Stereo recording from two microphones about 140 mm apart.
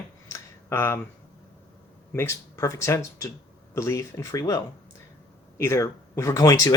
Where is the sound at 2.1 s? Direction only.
20° left (ahead or behind).